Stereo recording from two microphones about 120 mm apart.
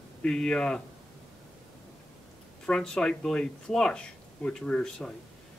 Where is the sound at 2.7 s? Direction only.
5° left (ahead or behind).